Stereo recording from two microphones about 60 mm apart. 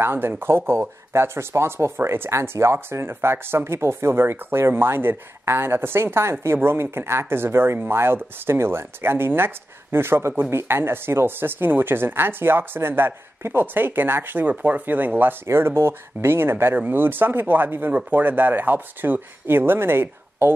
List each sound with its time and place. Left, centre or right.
0.0 s speech: right
15.4 s speech: right